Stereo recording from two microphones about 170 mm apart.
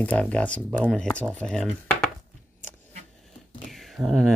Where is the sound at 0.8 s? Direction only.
5° left (ahead or behind).